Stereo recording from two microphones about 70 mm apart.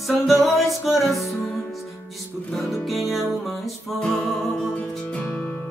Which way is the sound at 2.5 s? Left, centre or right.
Centre.